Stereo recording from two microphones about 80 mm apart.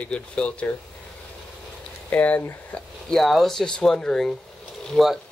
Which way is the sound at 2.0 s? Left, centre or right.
Centre.